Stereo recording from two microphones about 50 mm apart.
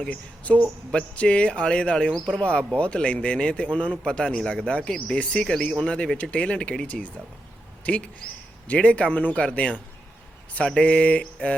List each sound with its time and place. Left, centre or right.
0.0 s speech: left